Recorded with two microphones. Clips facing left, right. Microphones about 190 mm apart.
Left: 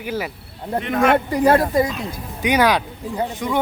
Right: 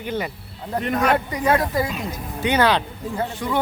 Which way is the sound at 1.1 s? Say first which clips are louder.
Left 5 dB; 30° left (ahead or behind).